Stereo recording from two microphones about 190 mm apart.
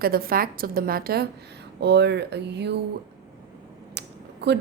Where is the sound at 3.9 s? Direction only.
60° right (ahead or behind).